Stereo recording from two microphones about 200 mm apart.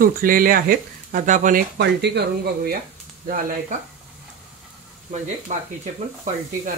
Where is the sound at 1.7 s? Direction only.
55° right (ahead or behind).